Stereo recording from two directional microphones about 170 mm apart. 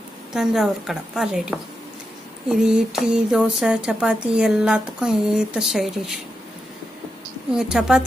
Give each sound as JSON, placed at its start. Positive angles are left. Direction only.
{"t": 0.3, "sound": "speech", "side_deg": 0}
{"t": 7.5, "sound": "speech", "side_deg": -5}